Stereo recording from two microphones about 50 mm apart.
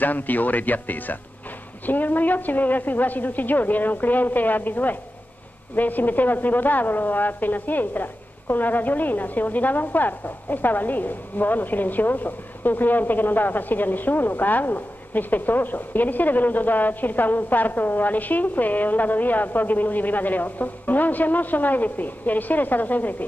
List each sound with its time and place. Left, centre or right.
0.0 s a woman's voice: left